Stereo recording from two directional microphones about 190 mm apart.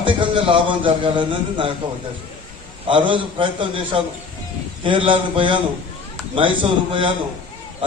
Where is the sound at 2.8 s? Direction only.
25° right (ahead or behind).